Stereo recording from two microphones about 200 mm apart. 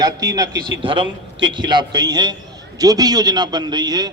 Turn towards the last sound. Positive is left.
turn(degrees=-20)  # may be behind; listen again after turning